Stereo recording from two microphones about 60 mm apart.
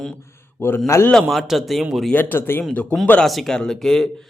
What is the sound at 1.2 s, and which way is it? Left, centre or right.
Speech, centre.